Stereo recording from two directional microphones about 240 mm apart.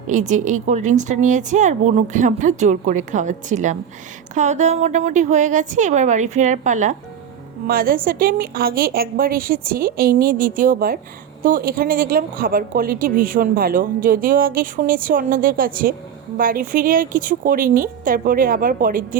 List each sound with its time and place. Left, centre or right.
0.1 s speech: right